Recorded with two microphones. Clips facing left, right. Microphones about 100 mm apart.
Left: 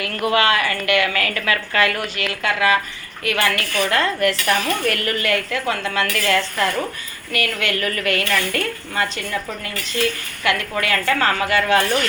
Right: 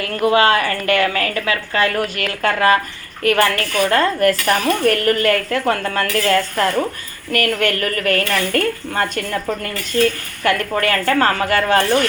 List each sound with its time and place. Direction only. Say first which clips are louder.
0.0 s speech: right 4 dB; 30° right (ahead or behind)
10.4 s speech: right 4 dB; 40° right (ahead or behind)